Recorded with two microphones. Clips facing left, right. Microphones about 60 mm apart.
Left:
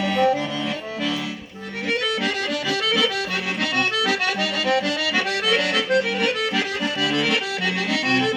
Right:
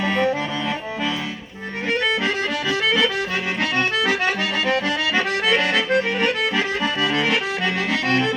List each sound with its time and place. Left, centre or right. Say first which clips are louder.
0.0 s accordion: left 1 dB; right
1.9 s accordion: right 2 dB; right